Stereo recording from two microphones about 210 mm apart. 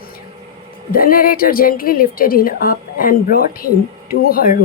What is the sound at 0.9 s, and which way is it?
A woman's voice, 45° left (ahead or behind).